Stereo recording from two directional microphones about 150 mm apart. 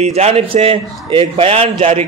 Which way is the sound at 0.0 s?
45° right (ahead or behind).